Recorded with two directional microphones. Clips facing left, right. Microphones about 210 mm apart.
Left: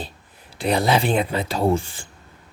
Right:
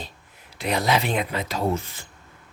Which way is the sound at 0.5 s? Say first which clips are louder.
Left 3 dB; 30° left (ahead or behind).